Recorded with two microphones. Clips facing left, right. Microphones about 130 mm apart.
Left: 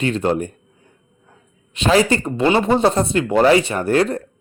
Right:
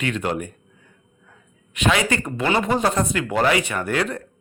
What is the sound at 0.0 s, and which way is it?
Speech, 30° left (ahead or behind).